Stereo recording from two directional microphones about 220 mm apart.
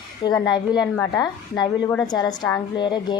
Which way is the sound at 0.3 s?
20° left (ahead or behind).